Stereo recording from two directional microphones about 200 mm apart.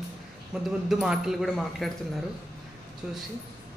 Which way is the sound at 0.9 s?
Centre (ahead or behind).